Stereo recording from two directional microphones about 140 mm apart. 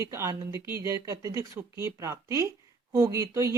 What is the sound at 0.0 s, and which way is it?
Speech, 20° right (ahead or behind).